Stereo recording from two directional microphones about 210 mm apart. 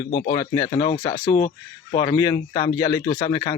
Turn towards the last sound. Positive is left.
turn(degrees=15)  # may be behind; listen again after turning